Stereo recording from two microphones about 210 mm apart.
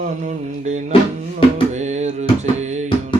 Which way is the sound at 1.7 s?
35° right (ahead or behind).